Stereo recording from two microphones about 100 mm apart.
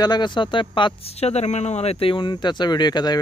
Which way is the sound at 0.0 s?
45° left (ahead or behind).